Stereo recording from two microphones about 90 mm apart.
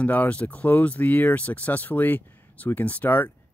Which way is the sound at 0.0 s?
15° left (ahead or behind).